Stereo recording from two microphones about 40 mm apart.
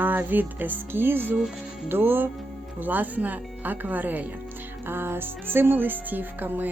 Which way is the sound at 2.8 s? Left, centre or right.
Right.